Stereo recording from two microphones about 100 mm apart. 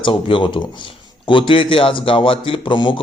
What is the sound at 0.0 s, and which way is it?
Speech, 60° left (ahead or behind).